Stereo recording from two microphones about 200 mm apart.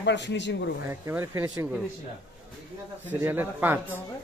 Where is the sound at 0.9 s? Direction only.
15° right (ahead or behind).